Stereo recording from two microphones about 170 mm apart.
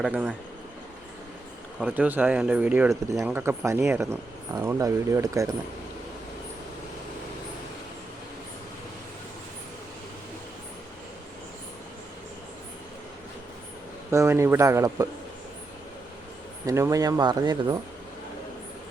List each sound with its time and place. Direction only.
0.0 s speech: 5° right (ahead or behind)
1.8 s speech: 10° right (ahead or behind)
14.1 s speech: 15° right (ahead or behind)
16.6 s speech: 20° right (ahead or behind)